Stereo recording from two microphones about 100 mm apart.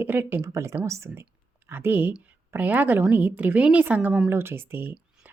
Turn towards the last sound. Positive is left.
turn(degrees=-20)  # may be behind; listen again after turning